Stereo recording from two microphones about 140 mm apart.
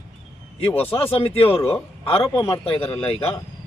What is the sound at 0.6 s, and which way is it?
Speech, 40° left (ahead or behind).